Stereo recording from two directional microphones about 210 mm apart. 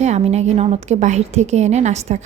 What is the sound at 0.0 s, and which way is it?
A woman's voice, 30° right (ahead or behind).